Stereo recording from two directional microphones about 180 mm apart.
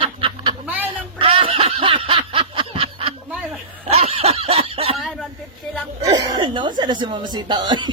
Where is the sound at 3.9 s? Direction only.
35° right (ahead or behind).